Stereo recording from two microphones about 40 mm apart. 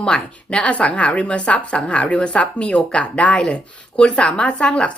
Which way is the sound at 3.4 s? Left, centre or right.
Left.